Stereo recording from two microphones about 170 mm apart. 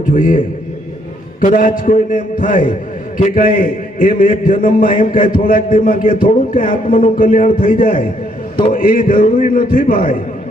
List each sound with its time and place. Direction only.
0.0 s a man's voice: 50° left (ahead or behind)